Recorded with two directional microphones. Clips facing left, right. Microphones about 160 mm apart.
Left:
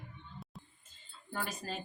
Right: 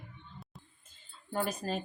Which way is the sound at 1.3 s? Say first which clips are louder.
Right 6 dB; 45° right (ahead or behind).